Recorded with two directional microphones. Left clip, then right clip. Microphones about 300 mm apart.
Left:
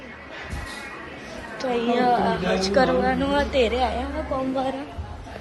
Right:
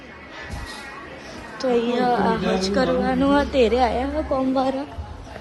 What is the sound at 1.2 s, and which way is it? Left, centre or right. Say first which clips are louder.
A woman's voice: right 4 dB; centre.